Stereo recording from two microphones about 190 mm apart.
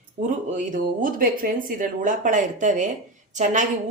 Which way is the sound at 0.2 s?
40° right (ahead or behind).